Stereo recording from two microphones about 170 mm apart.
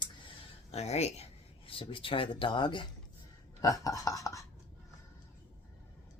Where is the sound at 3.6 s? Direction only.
20° left (ahead or behind).